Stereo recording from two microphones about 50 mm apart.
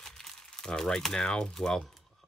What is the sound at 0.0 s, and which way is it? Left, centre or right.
Speech, centre.